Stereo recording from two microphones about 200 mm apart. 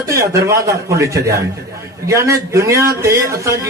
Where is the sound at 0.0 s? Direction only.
15° right (ahead or behind).